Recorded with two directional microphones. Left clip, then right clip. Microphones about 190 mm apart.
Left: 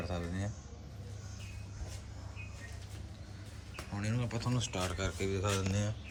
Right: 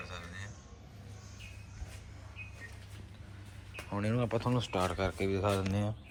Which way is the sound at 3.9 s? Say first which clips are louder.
Right 7 dB; 5° right (ahead or behind).